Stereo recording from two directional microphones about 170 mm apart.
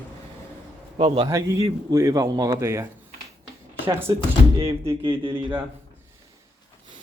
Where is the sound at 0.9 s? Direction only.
35° right (ahead or behind).